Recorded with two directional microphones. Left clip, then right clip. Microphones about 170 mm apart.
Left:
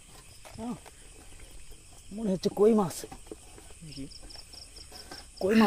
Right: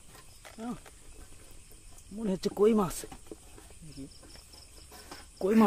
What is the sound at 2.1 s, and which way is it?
Speech, centre (ahead or behind).